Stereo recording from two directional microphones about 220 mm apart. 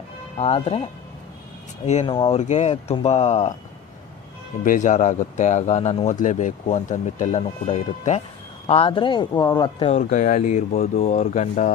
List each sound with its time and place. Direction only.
0.4 s speech: 25° left (ahead or behind)
1.9 s speech: 25° left (ahead or behind)
4.6 s speech: 35° left (ahead or behind)